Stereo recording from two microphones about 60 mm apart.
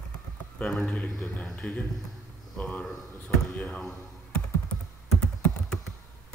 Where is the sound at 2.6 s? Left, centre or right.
Centre.